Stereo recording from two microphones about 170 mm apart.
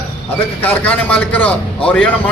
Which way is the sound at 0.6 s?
10° left (ahead or behind).